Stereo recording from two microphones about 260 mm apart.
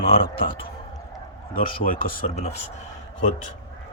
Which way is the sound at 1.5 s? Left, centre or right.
Left.